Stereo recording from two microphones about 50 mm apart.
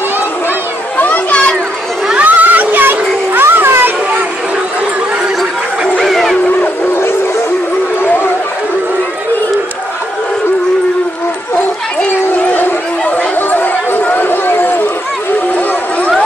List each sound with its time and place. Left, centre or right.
0.9 s children playing: left
2.2 s children playing: right
6.0 s howl: centre
13.5 s run: left